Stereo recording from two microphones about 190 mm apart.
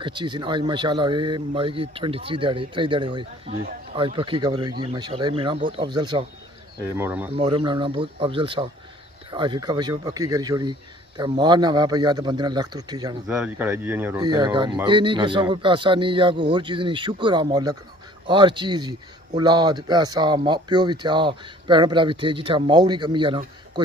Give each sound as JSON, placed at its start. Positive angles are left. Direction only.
{"t": 0.0, "sound": "speech", "side_deg": -25}
{"t": 7.0, "sound": "speech", "side_deg": -10}
{"t": 7.3, "sound": "speech", "side_deg": -25}
{"t": 13.4, "sound": "speech", "side_deg": -10}
{"t": 14.2, "sound": "speech", "side_deg": -25}